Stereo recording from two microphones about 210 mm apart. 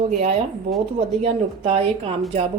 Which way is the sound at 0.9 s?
30° right (ahead or behind).